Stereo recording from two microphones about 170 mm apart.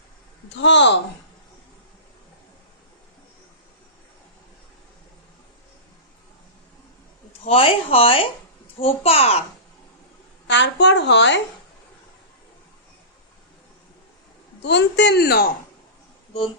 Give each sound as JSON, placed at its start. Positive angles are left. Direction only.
{"t": 0.5, "sound": "a woman's voice", "side_deg": 90}
{"t": 7.4, "sound": "speech", "side_deg": 35}
{"t": 10.4, "sound": "a woman's voice", "side_deg": 90}
{"t": 14.6, "sound": "a woman's voice", "side_deg": 90}